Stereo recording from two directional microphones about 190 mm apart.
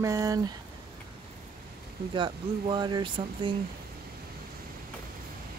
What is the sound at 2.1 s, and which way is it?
Speech, 25° right (ahead or behind).